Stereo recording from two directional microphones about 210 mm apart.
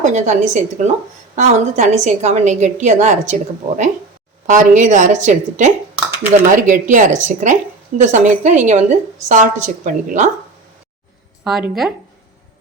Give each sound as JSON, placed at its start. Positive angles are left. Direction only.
{"t": 0.0, "sound": "speech", "side_deg": -35}
{"t": 4.4, "sound": "speech", "side_deg": -35}
{"t": 11.4, "sound": "speech", "side_deg": 0}